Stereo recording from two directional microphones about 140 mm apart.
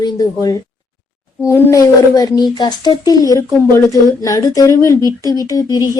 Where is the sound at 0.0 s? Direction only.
25° left (ahead or behind).